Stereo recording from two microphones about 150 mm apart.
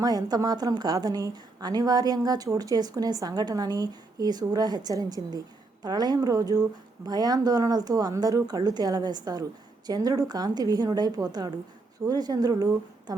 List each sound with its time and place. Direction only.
0.0 s a woman's voice: 25° right (ahead or behind)